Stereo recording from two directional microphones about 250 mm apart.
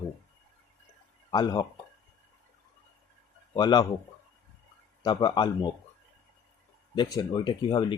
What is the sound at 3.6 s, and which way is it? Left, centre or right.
Speech, centre.